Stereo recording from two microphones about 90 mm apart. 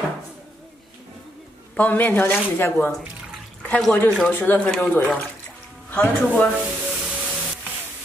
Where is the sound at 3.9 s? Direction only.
20° left (ahead or behind).